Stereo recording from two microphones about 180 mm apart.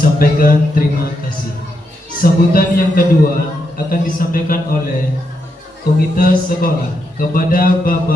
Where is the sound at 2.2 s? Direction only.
50° left (ahead or behind).